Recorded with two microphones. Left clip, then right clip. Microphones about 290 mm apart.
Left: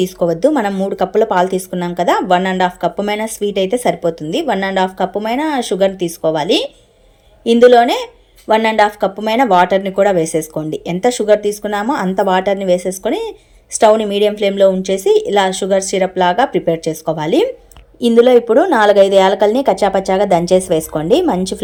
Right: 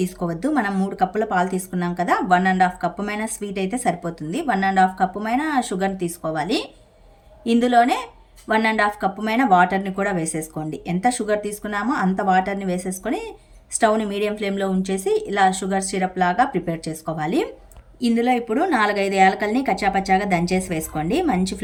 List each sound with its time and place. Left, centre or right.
0.3 s speech: centre
18.1 s speech: left
18.7 s speech: centre